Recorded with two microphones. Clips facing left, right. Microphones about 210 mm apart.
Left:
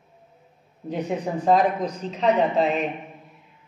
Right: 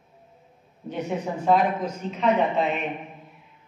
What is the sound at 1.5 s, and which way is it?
A man's voice, 35° left (ahead or behind).